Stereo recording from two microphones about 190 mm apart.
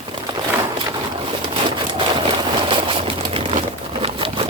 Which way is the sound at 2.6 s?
30° right (ahead or behind).